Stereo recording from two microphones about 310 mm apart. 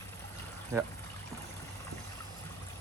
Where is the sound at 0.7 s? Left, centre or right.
Centre.